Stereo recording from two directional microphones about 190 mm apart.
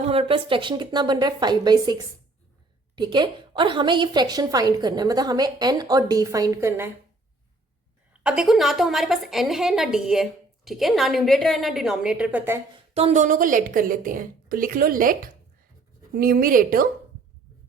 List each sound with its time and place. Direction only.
0.0 s a woman's voice: 30° right (ahead or behind); by 6.9 s 15° right (ahead or behind)
8.2 s a woman's voice: 5° right (ahead or behind)
12.9 s a woman's voice: 30° right (ahead or behind); by 16.8 s 50° right (ahead or behind)